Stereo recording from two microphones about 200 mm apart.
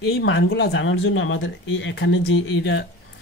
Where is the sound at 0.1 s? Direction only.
70° left (ahead or behind).